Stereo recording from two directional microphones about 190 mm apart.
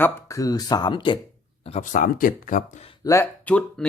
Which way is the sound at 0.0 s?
15° left (ahead or behind).